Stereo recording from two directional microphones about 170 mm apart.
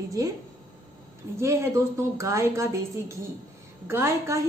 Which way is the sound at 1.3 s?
15° right (ahead or behind).